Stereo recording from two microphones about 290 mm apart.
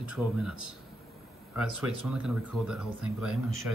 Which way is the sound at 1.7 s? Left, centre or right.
Right.